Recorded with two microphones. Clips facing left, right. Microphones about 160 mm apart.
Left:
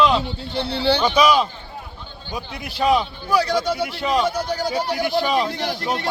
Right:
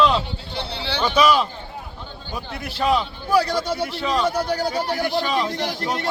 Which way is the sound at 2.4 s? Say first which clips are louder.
Left 1 dB; centre (ahead or behind).